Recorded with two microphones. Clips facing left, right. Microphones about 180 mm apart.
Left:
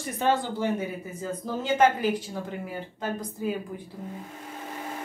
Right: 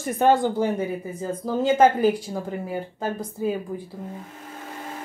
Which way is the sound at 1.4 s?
40° right (ahead or behind).